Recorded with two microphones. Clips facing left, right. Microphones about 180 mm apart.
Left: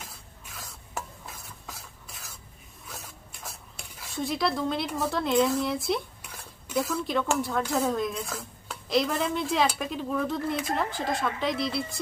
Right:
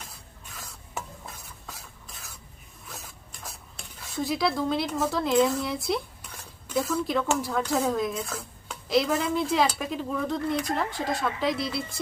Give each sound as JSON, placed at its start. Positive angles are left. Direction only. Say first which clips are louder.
{"t": 1.7, "sound": "stir", "louder": "even", "side_deg": 0}
{"t": 2.9, "sound": "dishes", "louder": "even", "side_deg": 0}
{"t": 4.9, "sound": "speech", "louder": "right 1 dB", "side_deg": 0}